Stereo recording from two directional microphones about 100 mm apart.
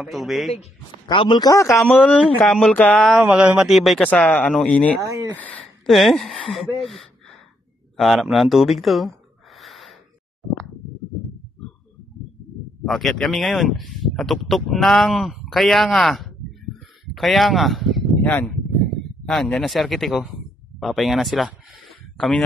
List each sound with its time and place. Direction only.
0.0 s speech: centre (ahead or behind)
1.0 s speech: 55° left (ahead or behind)
1.9 s speech: 15° left (ahead or behind)
3.1 s speech: 10° right (ahead or behind)
4.0 s speech: 15° left (ahead or behind)
5.0 s speech: 35° right (ahead or behind)
5.3 s speech: 15° left (ahead or behind)
5.6 s speech: centre (ahead or behind)
9.6 s gasp: centre (ahead or behind)
12.8 s speech: centre (ahead or behind)
18.2 s speech: 15° left (ahead or behind)
22.1 s a sound: 5° left (ahead or behind)